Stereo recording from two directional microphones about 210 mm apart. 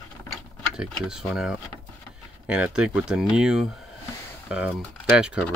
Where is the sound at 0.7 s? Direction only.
Centre (ahead or behind).